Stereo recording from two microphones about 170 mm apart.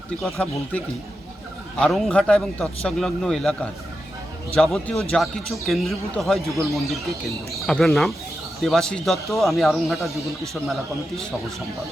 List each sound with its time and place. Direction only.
0.4 s speech: 10° left (ahead or behind)
1.8 s a man's voice: 5° left (ahead or behind)
4.5 s a man's voice: 5° left (ahead or behind)